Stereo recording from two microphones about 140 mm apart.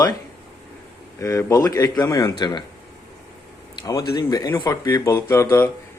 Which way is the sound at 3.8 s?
25° left (ahead or behind).